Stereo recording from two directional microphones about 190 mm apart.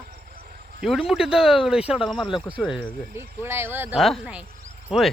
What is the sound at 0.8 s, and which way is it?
Speech, centre (ahead or behind).